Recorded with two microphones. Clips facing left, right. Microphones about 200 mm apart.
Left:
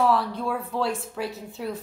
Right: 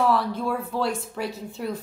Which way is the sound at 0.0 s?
Centre (ahead or behind).